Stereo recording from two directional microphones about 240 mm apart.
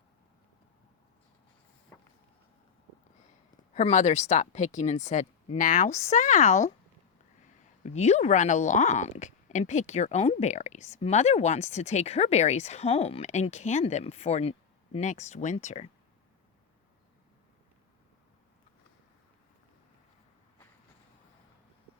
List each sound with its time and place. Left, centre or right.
3.8 s speech: left
7.9 s speech: left